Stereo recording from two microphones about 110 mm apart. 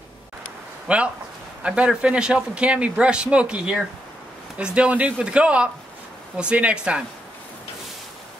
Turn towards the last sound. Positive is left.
turn(degrees=-10)  # may be behind; listen again after turning